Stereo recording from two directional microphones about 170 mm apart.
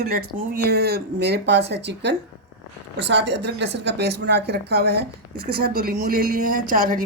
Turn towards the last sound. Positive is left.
turn(degrees=-55)  # may be behind; listen again after turning